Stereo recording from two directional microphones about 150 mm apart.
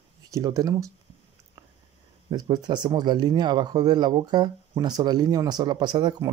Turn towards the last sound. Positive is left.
turn(degrees=-30)  # may be behind; listen again after turning